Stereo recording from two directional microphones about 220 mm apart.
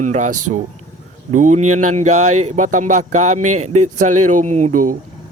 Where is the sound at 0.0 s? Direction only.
30° right (ahead or behind).